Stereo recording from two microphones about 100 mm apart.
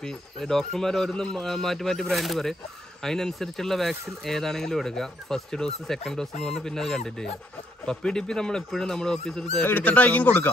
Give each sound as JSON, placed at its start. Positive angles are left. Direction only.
{"t": 0.0, "sound": "speech", "side_deg": 5}
{"t": 9.7, "sound": "speech", "side_deg": 15}